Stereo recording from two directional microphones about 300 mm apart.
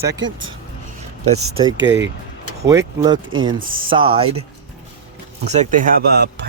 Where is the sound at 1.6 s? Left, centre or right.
Right.